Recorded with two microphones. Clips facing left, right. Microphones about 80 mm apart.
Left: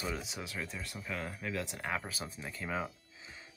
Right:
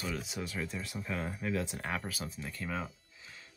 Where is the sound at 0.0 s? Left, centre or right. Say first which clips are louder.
Right 1 dB; centre.